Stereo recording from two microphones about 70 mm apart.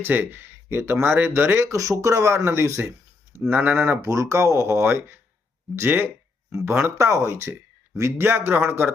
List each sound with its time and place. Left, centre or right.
0.0 s speech: right
1.6 s speech: right
3.5 s speech: right
8.2 s speech: right